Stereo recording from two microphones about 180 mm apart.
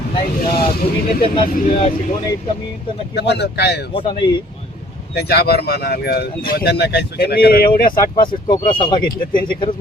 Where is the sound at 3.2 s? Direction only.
70° left (ahead or behind).